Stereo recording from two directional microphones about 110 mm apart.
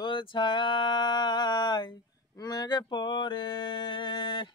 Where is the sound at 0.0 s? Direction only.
50° left (ahead or behind).